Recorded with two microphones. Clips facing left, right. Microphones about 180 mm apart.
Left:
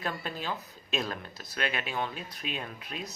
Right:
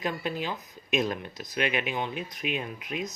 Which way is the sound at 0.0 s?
15° right (ahead or behind).